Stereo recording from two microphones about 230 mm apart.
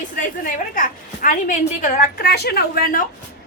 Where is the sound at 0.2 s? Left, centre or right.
Left.